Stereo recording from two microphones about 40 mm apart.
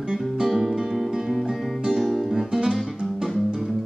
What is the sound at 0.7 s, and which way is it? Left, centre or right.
Music, centre.